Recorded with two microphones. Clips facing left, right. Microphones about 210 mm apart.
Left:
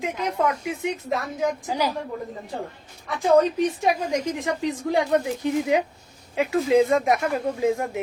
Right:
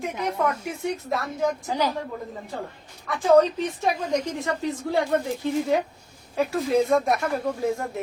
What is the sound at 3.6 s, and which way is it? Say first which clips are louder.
A woman's voice: left 3 dB; 15° left (ahead or behind).